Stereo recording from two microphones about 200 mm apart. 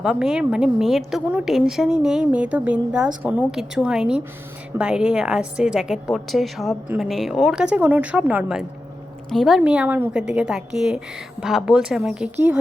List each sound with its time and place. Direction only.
0.0 s a woman's voice: 5° right (ahead or behind)